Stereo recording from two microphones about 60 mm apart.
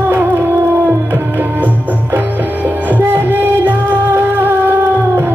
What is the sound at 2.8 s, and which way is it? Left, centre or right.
Music, right.